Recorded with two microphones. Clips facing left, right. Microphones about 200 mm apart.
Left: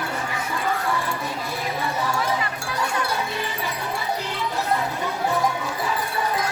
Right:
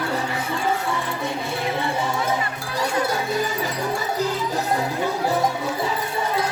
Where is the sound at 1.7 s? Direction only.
25° right (ahead or behind).